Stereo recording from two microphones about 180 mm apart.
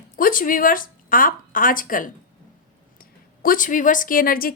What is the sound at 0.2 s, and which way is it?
Speech, 50° left (ahead or behind).